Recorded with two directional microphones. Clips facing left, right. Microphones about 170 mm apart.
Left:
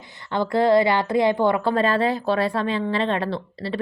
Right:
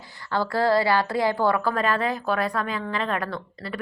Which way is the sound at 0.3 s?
20° left (ahead or behind).